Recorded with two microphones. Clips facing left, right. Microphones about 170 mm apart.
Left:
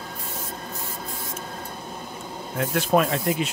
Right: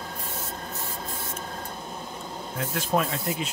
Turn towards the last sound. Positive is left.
turn(degrees=65)  # may be behind; listen again after turning